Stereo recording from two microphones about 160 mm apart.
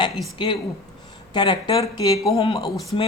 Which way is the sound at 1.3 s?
30° left (ahead or behind).